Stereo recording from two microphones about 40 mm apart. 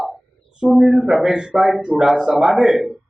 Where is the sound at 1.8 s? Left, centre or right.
Centre.